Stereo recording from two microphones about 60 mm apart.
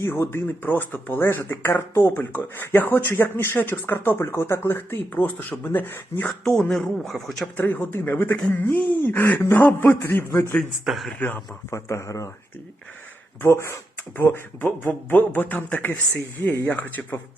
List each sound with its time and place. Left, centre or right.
0.0 s speech: left
5.2 s speech: left
6.2 s speech: centre
7.5 s a man's voice: left
10.8 s speech: centre
11.7 s speech: left
13.5 s speech: left
14.2 s speech: left